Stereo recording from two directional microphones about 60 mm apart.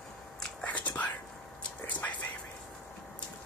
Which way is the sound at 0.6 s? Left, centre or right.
Left.